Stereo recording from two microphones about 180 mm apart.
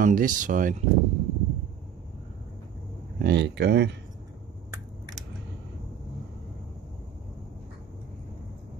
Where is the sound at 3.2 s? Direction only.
70° right (ahead or behind).